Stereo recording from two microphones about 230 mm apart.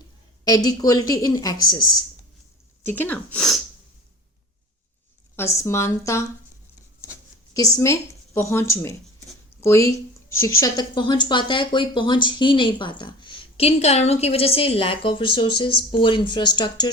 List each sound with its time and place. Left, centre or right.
0.4 s speech: centre
5.4 s speech: centre